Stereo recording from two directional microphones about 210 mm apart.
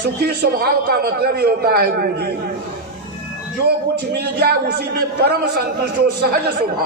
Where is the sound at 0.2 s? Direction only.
45° right (ahead or behind).